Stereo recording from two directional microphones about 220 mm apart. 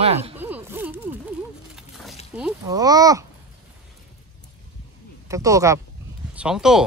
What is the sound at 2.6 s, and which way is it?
Speech, 15° right (ahead or behind).